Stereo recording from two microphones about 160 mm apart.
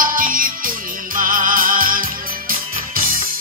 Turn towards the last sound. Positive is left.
turn(degrees=-60)  # may be behind; listen again after turning